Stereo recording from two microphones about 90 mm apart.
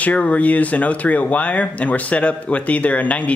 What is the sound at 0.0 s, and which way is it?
Speech, 15° left (ahead or behind).